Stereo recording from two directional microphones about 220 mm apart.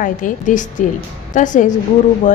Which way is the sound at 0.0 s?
35° left (ahead or behind).